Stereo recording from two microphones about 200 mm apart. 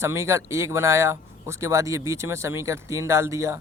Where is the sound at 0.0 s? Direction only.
15° right (ahead or behind).